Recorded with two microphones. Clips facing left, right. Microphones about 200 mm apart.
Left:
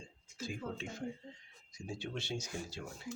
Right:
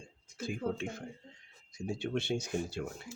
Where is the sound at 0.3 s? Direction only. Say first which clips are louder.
Right 6 dB; 55° right (ahead or behind).